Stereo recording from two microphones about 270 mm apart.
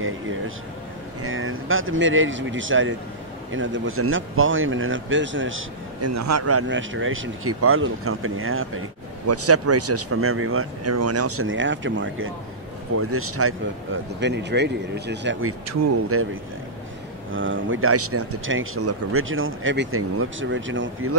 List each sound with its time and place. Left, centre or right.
1.2 s speech: right
5.9 s speech: right
14.2 s speech: right
15.7 s speech: right
17.3 s speech: right